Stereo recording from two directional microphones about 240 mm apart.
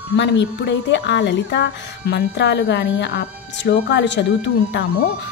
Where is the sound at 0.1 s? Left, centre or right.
Left.